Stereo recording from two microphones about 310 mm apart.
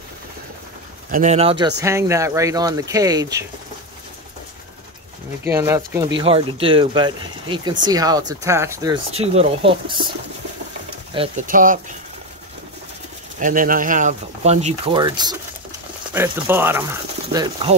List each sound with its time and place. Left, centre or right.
1.1 s speech: right
5.4 s speech: centre
9.1 s speech: centre
11.1 s speech: right
13.4 s speech: right